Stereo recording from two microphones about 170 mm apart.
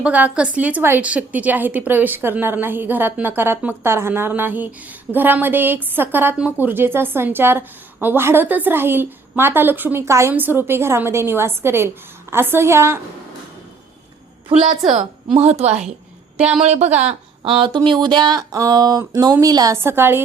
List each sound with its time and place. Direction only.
0.0 s a woman's voice: 10° right (ahead or behind)
15.3 s a woman's voice: 40° right (ahead or behind); by 20.2 s 15° right (ahead or behind)